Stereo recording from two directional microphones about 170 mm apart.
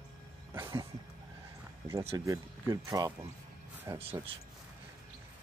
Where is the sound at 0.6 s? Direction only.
20° right (ahead or behind).